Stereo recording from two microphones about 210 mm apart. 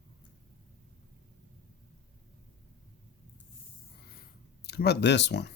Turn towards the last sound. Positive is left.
turn(degrees=55)  # may be behind; listen again after turning